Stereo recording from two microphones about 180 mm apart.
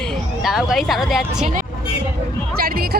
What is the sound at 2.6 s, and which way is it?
Speech, 55° right (ahead or behind).